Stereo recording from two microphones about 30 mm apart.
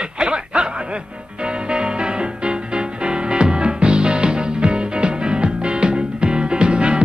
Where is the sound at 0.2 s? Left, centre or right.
Right.